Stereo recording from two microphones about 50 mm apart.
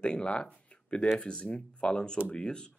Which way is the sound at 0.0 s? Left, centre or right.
Left.